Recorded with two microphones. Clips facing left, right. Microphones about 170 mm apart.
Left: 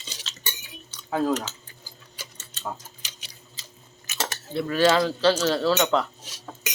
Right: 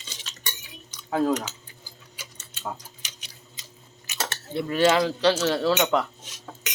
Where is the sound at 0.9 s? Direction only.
10° right (ahead or behind).